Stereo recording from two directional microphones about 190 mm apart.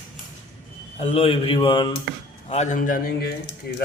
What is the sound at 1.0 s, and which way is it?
Speech, 30° left (ahead or behind).